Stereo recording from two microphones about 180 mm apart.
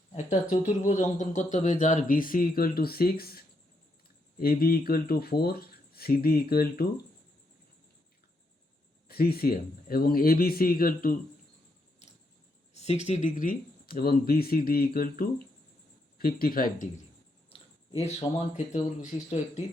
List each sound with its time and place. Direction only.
0.1 s speech: 35° left (ahead or behind); by 7.0 s 60° left (ahead or behind)
9.0 s speech: 60° left (ahead or behind)
12.7 s a sound: 35° left (ahead or behind)
13.1 s speech: 45° left (ahead or behind)
17.5 s speech: 35° left (ahead or behind)